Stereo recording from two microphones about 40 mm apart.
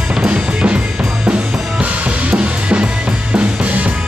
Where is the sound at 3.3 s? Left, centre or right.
Right.